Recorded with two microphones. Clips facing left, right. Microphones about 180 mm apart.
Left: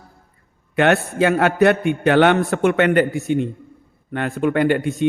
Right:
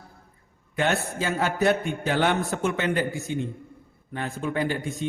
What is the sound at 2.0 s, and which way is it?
Speech, 70° left (ahead or behind).